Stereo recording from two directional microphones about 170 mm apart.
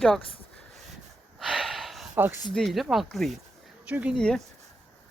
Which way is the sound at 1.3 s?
Centre (ahead or behind).